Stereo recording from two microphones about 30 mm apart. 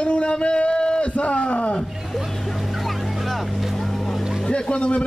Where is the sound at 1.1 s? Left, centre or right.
Left.